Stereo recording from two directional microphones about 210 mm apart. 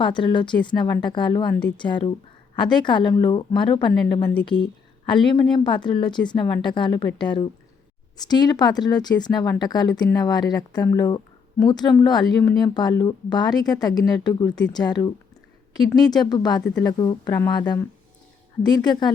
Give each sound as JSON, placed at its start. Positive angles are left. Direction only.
{"t": 0.0, "sound": "a woman's voice", "side_deg": 20}